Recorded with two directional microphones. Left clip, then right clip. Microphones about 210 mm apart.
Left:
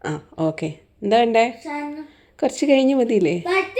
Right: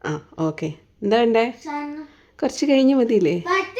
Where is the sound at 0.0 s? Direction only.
10° right (ahead or behind).